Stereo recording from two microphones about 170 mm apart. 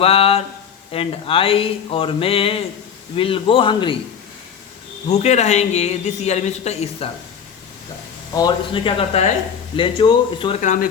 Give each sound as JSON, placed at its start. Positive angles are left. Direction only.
{"t": 0.0, "sound": "a man's voice", "side_deg": 35}
{"t": 5.0, "sound": "speech", "side_deg": 40}
{"t": 8.4, "sound": "speech", "side_deg": 25}
{"t": 10.6, "sound": "speech", "side_deg": 50}